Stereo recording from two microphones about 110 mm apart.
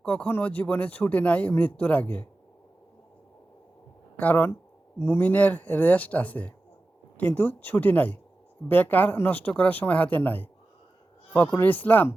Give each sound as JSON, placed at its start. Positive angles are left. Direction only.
{"t": 0.0, "sound": "speech", "side_deg": 10}
{"t": 4.2, "sound": "speech", "side_deg": 15}